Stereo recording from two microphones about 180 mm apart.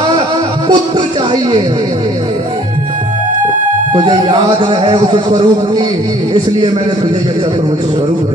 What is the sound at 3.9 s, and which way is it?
A man's voice, 25° right (ahead or behind).